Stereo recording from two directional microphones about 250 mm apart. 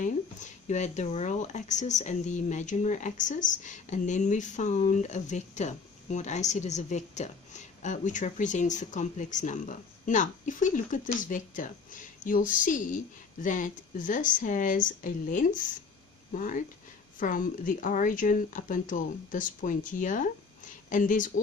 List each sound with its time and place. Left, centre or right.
0.0 s a woman's voice: left